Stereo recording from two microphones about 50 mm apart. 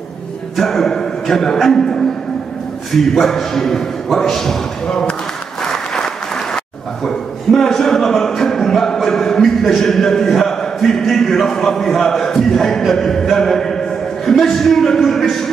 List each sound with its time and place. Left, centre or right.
0.6 s speech: centre
3.0 s a man's voice: centre
4.8 s speech: centre
5.6 s applause: centre
7.1 s a sound: centre
14.4 s a man's voice: centre